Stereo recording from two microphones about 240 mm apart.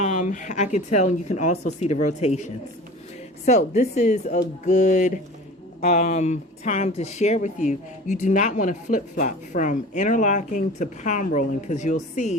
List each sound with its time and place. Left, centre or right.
0.0 s speech: left